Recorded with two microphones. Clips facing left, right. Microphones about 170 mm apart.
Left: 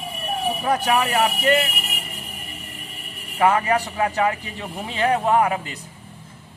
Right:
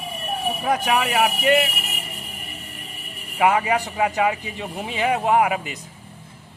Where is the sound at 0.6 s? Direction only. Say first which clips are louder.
Even; 15° right (ahead or behind).